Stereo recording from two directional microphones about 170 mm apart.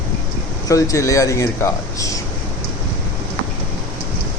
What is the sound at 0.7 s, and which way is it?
Speech, 20° left (ahead or behind).